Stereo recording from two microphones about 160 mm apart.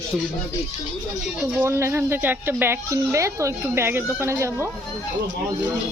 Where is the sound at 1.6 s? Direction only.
15° right (ahead or behind).